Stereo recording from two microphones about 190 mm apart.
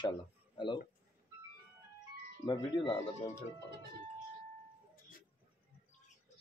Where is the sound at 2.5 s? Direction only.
25° left (ahead or behind).